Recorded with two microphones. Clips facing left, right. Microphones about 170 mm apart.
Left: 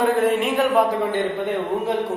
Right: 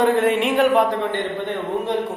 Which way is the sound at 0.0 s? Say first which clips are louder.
Right 1 dB; centre (ahead or behind).